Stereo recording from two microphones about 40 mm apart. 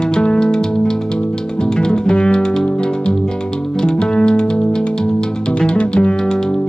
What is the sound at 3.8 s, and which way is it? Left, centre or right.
Music, centre.